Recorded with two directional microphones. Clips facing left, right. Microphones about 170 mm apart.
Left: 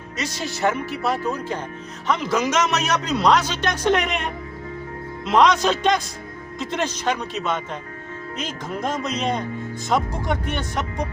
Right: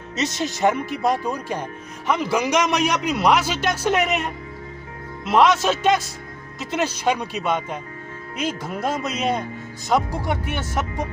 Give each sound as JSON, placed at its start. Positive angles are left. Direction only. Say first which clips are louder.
{"t": 0.2, "sound": "a man's voice", "louder": "right 3 dB", "side_deg": -20}